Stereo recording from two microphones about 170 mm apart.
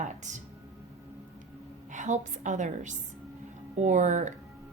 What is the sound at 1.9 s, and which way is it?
A woman's voice, 45° right (ahead or behind).